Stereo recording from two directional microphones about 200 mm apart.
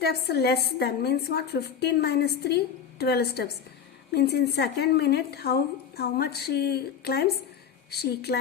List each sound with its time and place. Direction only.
0.0 s a woman's voice: 55° left (ahead or behind)